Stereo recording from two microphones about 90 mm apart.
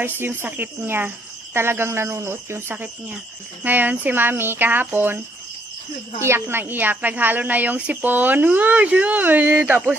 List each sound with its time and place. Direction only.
0.0 s speech: 25° right (ahead or behind)
6.2 s speech: 25° right (ahead or behind)